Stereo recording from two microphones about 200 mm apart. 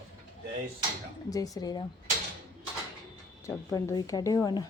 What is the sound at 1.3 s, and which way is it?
Speech, 20° left (ahead or behind).